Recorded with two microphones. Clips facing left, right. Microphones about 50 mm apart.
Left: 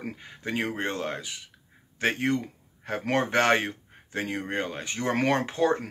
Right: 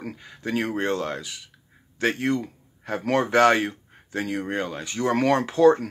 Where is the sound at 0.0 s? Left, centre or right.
Left.